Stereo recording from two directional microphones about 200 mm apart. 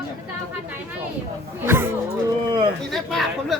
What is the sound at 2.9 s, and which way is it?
Chatter, centre (ahead or behind).